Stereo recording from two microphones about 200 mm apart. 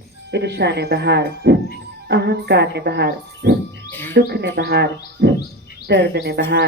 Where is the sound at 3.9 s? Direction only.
10° left (ahead or behind).